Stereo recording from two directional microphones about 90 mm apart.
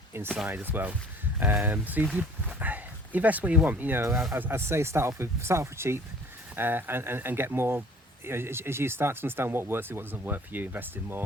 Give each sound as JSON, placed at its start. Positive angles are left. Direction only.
{"t": 0.4, "sound": "speech", "side_deg": -20}